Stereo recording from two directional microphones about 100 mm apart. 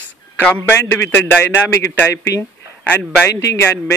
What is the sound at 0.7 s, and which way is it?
Speech, 25° left (ahead or behind).